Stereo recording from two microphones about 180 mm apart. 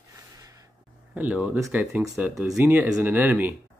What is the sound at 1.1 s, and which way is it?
Speech, 5° right (ahead or behind).